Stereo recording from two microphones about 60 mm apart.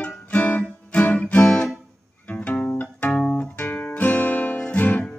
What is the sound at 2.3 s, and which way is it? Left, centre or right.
Music, left.